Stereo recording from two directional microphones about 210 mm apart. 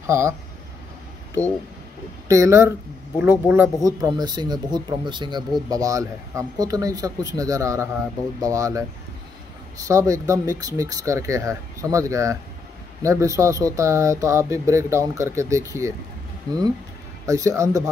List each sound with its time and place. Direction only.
0.0 s speech: 15° right (ahead or behind)
2.2 s speech: 15° right (ahead or behind)
9.8 s speech: 15° right (ahead or behind)